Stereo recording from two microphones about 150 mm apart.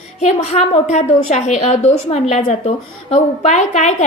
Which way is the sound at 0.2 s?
50° left (ahead or behind).